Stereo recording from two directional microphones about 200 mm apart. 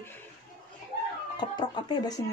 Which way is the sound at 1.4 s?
20° left (ahead or behind).